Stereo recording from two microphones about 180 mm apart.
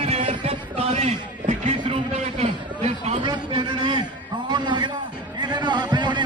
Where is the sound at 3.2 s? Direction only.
25° right (ahead or behind).